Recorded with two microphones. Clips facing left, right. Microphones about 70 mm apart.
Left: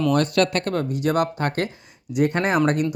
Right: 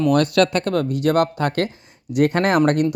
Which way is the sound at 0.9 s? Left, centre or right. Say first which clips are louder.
Right 3 dB; right.